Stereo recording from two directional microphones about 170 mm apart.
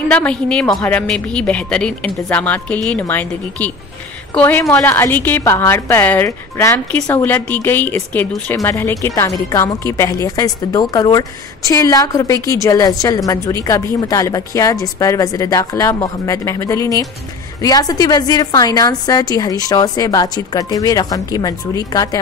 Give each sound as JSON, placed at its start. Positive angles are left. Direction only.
{"t": 0.1, "sound": "a woman's voice", "side_deg": 5}